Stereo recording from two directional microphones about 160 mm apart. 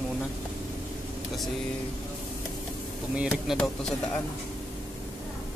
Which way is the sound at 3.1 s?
Centre (ahead or behind).